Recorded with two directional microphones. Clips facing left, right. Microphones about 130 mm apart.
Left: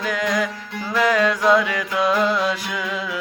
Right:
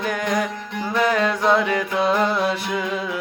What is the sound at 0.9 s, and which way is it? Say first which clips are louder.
Music: left 1 dB; 25° right (ahead or behind).